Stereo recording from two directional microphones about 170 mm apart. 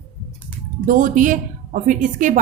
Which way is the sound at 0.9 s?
50° right (ahead or behind).